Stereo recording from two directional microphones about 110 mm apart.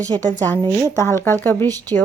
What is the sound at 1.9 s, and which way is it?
Speech, 55° right (ahead or behind).